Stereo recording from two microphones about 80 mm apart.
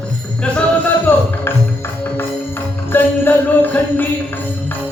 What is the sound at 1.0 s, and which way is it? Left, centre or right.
Music, left.